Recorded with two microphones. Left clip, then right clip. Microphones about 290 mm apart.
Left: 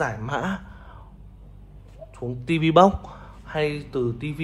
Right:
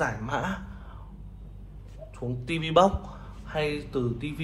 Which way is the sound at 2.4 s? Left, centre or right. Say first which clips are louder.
Left 5 dB; left.